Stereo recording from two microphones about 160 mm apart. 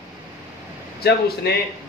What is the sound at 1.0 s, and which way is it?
Speech, 85° left.